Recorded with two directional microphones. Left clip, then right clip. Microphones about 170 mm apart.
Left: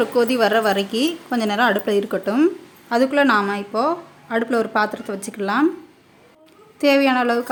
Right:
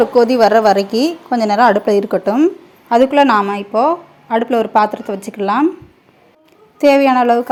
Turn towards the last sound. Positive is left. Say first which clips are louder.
# right 6 dB
turn(degrees=-15)  # may be behind; listen again after turning